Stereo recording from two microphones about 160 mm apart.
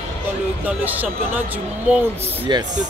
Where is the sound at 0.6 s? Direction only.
10° right (ahead or behind).